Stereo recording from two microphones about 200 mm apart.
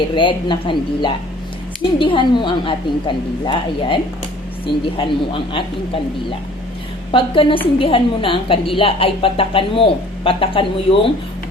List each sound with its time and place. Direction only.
0.1 s a woman's voice: 25° left (ahead or behind)
7.1 s a woman's voice: 25° left (ahead or behind)